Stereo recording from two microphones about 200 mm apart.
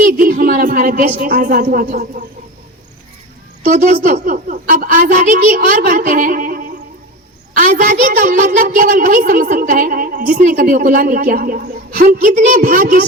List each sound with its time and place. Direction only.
0.0 s speech: 45° right (ahead or behind)
3.6 s a woman's voice: 45° right (ahead or behind)